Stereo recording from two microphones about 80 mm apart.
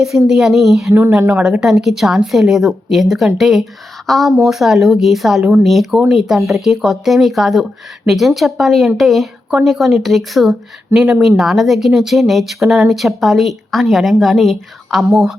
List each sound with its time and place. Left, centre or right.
0.3 s speech: centre
1.4 s a woman's voice: centre
1.6 s speech: centre